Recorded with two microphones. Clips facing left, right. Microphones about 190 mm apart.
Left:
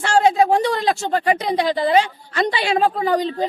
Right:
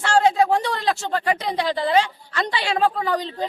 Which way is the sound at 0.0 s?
15° left (ahead or behind).